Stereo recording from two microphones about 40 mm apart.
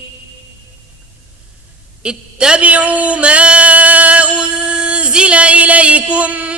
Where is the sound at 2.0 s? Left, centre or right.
Right.